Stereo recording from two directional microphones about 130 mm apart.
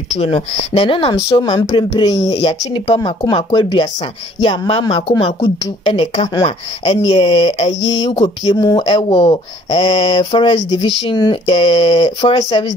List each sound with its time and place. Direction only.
0.1 s speech: 50° left (ahead or behind); by 12.7 s 35° left (ahead or behind)